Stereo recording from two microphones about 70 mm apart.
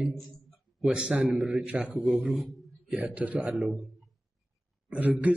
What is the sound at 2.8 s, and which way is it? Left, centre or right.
Speech, centre.